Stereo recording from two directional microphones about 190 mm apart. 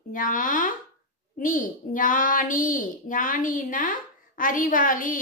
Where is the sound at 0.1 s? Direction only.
45° left (ahead or behind).